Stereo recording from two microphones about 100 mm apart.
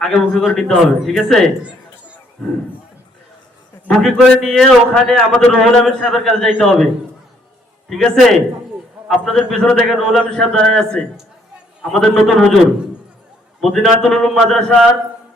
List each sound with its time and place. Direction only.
0.0 s a man's voice: 5° left (ahead or behind)
3.8 s a man's voice: 5° left (ahead or behind)
7.9 s a man's voice: centre (ahead or behind)
13.6 s a man's voice: centre (ahead or behind)